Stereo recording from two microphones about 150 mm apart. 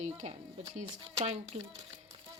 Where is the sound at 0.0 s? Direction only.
50° right (ahead or behind).